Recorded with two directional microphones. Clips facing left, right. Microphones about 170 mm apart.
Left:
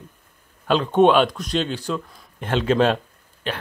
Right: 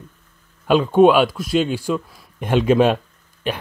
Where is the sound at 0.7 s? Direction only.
10° right (ahead or behind).